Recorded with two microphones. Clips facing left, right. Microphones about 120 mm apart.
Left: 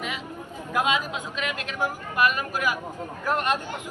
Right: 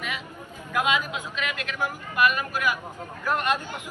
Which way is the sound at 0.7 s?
35° left (ahead or behind).